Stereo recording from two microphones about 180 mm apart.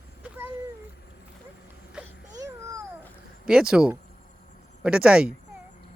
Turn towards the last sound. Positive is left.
turn(degrees=-5)  # may be behind; listen again after turning